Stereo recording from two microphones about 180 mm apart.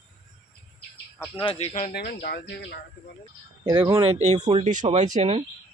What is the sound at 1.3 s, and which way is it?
Speech, 30° left (ahead or behind).